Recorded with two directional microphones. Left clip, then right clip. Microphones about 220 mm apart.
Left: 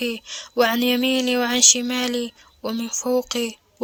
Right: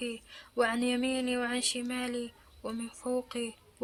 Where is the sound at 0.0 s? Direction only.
40° left (ahead or behind).